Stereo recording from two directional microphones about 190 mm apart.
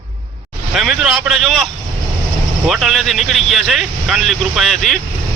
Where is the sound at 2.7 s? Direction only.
Centre (ahead or behind).